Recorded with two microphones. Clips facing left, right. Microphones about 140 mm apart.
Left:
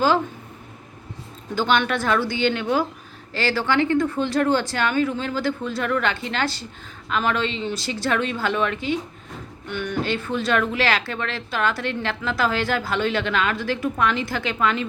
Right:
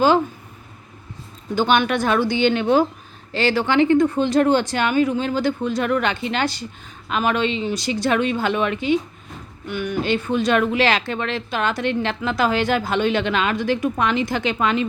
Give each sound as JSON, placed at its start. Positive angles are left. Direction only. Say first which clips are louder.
{"t": 1.5, "sound": "speech", "louder": "right 3 dB", "side_deg": -15}